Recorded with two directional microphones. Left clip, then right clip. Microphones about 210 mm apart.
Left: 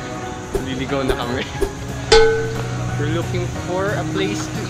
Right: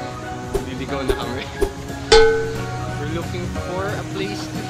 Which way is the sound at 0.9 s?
Centre (ahead or behind).